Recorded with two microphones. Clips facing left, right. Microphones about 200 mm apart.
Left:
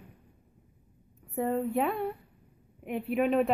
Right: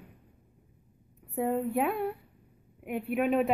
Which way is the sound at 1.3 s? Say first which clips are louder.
Even; 5° right (ahead or behind).